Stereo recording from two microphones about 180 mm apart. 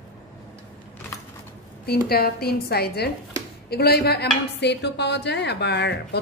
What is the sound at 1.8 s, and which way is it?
A woman's voice, 60° left (ahead or behind).